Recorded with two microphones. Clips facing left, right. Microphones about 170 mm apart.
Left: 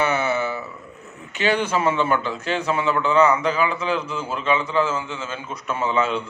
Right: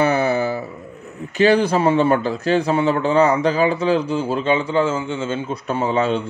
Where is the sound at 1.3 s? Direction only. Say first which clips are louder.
Right 6 dB; 35° right (ahead or behind).